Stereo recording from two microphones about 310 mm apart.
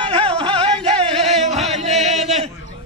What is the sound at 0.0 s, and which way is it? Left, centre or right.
Music, centre.